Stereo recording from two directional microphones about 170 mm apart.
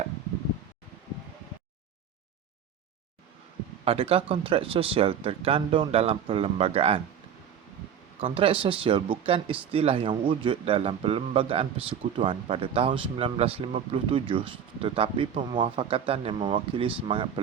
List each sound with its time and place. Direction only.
3.8 s speech: 35° right (ahead or behind)
8.2 s speech: 30° right (ahead or behind)